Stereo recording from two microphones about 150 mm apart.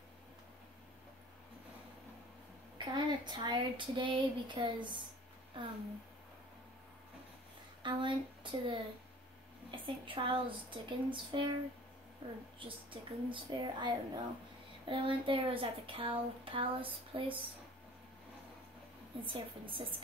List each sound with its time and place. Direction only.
2.8 s speech: 30° right (ahead or behind)
7.8 s speech: 30° right (ahead or behind)
19.2 s speech: 35° right (ahead or behind)